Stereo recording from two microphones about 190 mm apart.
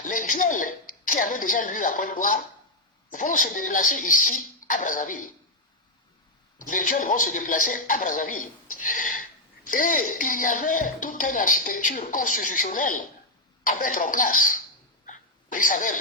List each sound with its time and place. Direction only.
0.0 s speech: 45° left (ahead or behind)
6.6 s speech: 45° left (ahead or behind)
15.0 s a sound: 45° left (ahead or behind)